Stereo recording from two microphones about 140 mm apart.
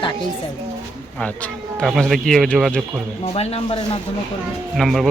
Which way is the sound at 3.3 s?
45° left (ahead or behind).